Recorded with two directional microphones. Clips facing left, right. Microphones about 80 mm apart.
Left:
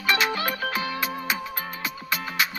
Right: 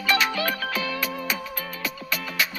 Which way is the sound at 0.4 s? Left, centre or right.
Left.